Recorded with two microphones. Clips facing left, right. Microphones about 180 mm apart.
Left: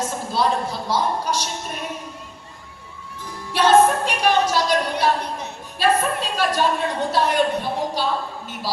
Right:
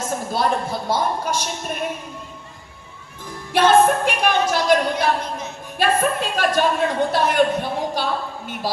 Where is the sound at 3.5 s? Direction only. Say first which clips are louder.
Right 1 dB; 55° right (ahead or behind).